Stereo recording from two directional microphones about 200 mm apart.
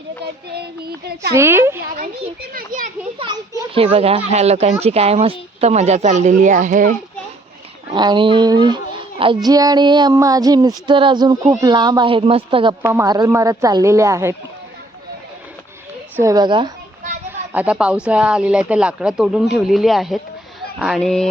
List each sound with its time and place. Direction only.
0.5 s child singing: 55° right (ahead or behind)
1.3 s a woman's voice: 10° right (ahead or behind)
2.5 s child singing: 45° right (ahead or behind)
3.2 s a child's voice: 25° right (ahead or behind); by 6.9 s 40° right (ahead or behind)
7.9 s a woman's voice: 20° right (ahead or behind)
16.2 s speech: 20° right (ahead or behind)
17.5 s speech: 5° right (ahead or behind)